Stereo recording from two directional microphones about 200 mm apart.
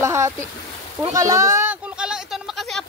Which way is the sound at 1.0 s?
15° right (ahead or behind).